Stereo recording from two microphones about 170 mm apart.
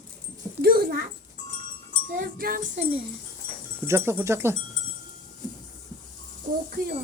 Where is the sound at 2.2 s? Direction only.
60° right (ahead or behind).